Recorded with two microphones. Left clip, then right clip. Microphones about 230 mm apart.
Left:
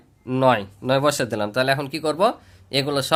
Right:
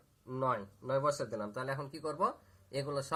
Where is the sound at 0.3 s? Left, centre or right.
Left.